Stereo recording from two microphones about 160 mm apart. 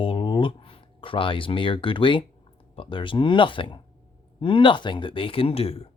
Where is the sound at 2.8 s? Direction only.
30° left (ahead or behind).